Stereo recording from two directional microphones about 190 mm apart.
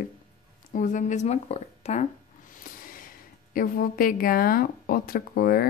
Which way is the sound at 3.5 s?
50° left (ahead or behind).